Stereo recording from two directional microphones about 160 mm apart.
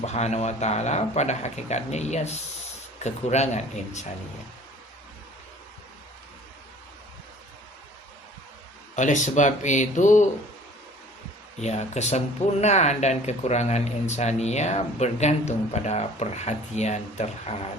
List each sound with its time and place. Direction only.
0.0 s speech: 45° left (ahead or behind)
9.0 s speech: 50° left (ahead or behind)
11.6 s speech: 45° left (ahead or behind)